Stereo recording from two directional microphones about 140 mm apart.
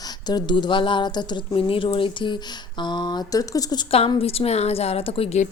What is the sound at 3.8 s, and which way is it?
A woman's voice, 45° left (ahead or behind).